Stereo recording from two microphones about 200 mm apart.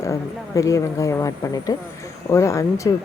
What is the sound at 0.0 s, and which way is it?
Speech, 15° left (ahead or behind).